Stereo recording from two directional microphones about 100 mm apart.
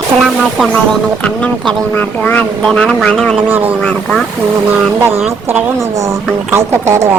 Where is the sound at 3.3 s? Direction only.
20° right (ahead or behind).